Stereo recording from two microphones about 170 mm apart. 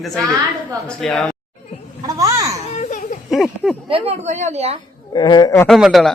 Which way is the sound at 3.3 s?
Centre (ahead or behind).